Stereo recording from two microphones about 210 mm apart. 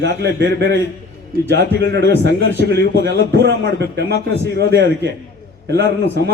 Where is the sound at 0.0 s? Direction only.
55° right (ahead or behind).